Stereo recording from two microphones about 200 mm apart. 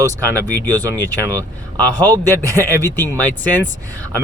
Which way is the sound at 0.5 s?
10° left (ahead or behind).